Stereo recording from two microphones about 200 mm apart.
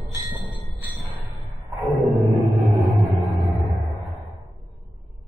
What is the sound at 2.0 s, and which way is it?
Music, centre (ahead or behind).